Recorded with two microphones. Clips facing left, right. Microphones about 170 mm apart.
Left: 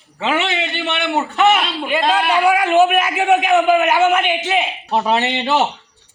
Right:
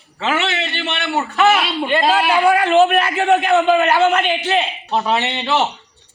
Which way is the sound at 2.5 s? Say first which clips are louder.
Even; 10° left (ahead or behind).